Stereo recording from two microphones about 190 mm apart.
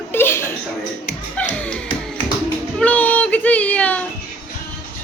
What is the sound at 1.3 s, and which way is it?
Music, 5° left (ahead or behind).